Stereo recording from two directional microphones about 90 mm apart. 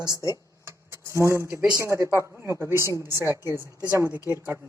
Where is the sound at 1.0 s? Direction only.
30° right (ahead or behind).